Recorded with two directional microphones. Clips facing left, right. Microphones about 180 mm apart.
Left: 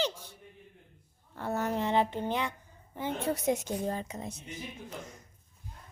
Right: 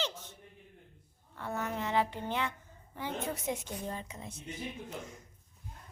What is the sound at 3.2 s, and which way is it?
A woman's voice, 40° left (ahead or behind).